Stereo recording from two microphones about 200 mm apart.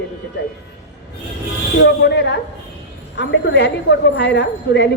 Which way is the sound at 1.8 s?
60° left (ahead or behind).